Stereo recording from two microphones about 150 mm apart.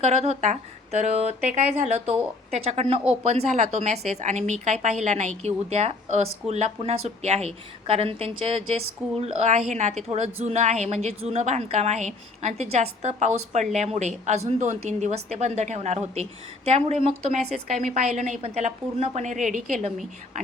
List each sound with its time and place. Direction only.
0.0 s a woman's voice: 45° right (ahead or behind)